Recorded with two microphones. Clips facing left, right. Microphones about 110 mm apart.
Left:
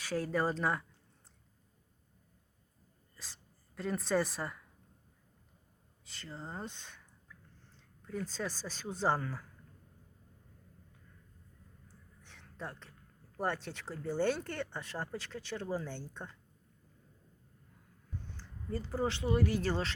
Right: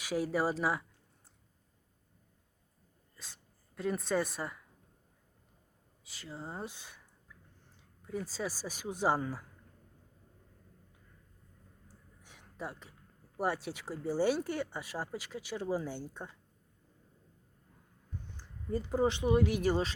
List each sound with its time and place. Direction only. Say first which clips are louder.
0.0 s speech: right 1 dB; 10° right (ahead or behind)
3.2 s a woman's voice: even; centre (ahead or behind)
6.1 s speech: right 1 dB; 5° right (ahead or behind)
12.2 s a sound: right 2 dB; 10° right (ahead or behind)
13.3 s speech: right 2 dB; 10° right (ahead or behind)
18.3 s speech: right 4 dB; 15° right (ahead or behind)